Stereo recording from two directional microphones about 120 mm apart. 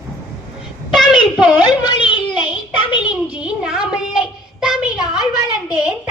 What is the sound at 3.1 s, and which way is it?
Child singing, 10° right (ahead or behind).